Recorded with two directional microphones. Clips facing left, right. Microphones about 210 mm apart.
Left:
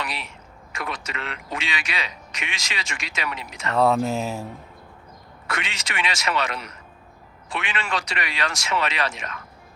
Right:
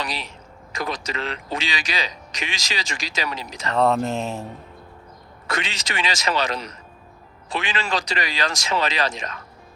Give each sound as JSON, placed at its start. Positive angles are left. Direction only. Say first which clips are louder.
{"t": 0.0, "sound": "speech", "louder": "right 2 dB", "side_deg": -35}
{"t": 3.8, "sound": "speech", "louder": "even", "side_deg": 5}
{"t": 5.5, "sound": "speech", "louder": "right 3 dB", "side_deg": -35}